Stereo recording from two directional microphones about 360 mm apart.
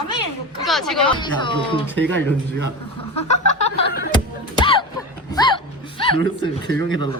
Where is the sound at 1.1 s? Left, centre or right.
Centre.